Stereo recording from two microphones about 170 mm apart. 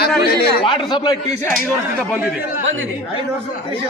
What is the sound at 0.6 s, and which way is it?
Speech, 30° left (ahead or behind).